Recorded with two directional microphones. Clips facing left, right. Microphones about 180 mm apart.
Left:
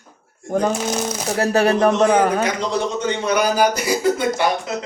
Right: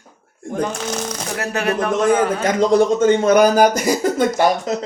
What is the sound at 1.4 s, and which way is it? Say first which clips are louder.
Speech: left 5 dB; 35° left (ahead or behind).